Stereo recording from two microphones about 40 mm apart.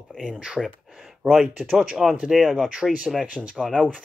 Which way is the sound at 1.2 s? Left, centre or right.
Centre.